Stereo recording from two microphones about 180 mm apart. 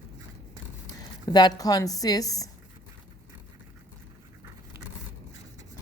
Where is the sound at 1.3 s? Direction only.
20° left (ahead or behind).